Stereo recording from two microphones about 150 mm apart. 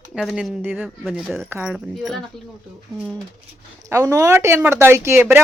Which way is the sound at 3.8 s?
25° right (ahead or behind).